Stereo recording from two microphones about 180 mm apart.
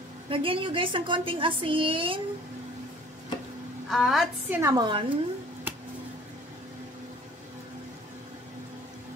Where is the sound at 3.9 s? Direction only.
Centre (ahead or behind).